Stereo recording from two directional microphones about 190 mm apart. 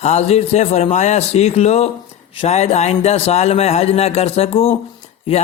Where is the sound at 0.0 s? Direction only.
35° left (ahead or behind).